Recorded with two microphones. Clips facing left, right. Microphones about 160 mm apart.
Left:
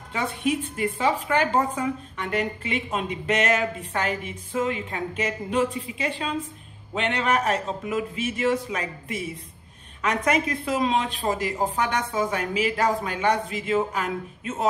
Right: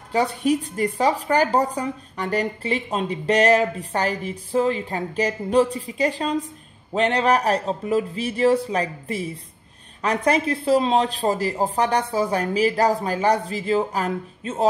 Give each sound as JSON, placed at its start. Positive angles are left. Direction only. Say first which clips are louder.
{"t": 0.1, "sound": "a woman's voice", "louder": "right 5 dB", "side_deg": -35}